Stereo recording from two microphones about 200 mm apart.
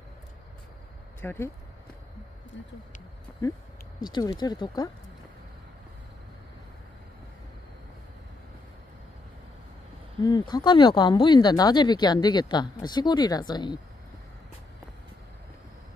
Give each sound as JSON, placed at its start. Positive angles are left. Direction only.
{"t": 1.2, "sound": "speech", "side_deg": 10}
{"t": 2.5, "sound": "speech", "side_deg": 65}
{"t": 4.0, "sound": "speech", "side_deg": 20}
{"t": 10.2, "sound": "speech", "side_deg": 20}